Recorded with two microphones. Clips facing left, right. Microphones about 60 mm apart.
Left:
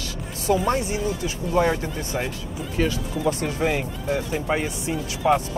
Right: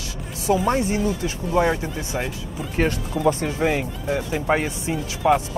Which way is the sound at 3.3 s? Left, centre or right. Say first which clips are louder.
Right 3 dB; right.